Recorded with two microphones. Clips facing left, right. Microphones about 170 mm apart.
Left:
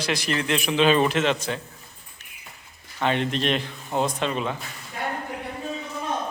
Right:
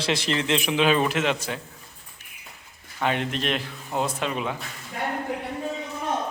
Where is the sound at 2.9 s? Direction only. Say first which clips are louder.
Left 2 dB; 5° right (ahead or behind).